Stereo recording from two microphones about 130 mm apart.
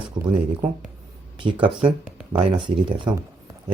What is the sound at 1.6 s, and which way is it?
Speech, 40° right (ahead or behind).